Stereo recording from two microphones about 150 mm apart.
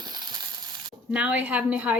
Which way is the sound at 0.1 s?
30° right (ahead or behind).